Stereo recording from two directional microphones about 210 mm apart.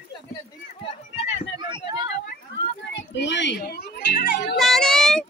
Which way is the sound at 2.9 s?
55° left (ahead or behind).